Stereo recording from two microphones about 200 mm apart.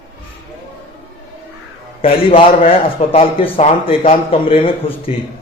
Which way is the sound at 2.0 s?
30° left (ahead or behind).